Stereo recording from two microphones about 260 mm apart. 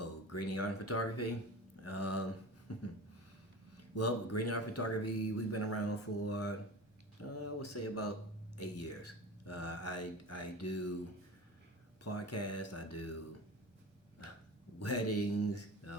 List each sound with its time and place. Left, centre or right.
0.0 s speech: left
12.0 s speech: left
14.8 s speech: left